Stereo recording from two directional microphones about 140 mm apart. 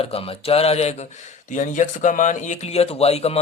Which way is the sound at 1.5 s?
65° left (ahead or behind).